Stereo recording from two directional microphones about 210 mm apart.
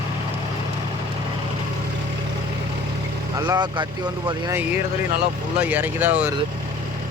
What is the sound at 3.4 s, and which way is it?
Speech, 20° right (ahead or behind).